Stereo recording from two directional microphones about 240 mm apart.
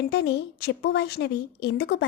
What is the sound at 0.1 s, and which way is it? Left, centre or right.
A woman's voice, left.